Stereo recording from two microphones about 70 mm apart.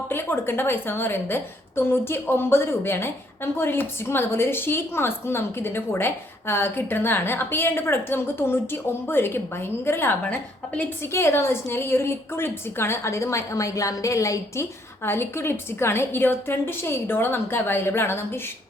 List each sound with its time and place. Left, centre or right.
0.1 s a woman's voice: left